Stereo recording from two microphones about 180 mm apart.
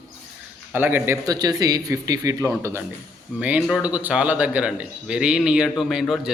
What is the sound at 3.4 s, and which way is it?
A man's voice, 5° right (ahead or behind).